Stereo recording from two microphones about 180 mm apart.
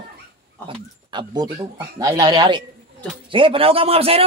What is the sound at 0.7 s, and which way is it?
A man's voice, 25° right (ahead or behind).